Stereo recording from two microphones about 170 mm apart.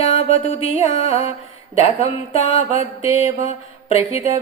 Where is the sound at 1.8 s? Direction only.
35° left (ahead or behind).